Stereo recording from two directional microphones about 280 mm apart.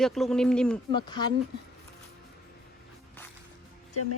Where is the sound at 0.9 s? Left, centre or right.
Centre.